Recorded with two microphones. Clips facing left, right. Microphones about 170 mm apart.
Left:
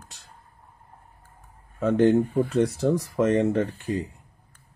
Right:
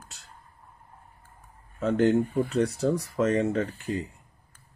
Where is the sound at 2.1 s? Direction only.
20° left (ahead or behind).